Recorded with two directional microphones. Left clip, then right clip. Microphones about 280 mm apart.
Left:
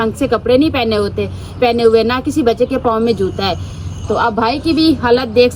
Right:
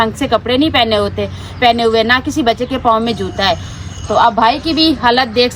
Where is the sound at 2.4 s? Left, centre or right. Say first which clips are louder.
Left 1 dB; centre.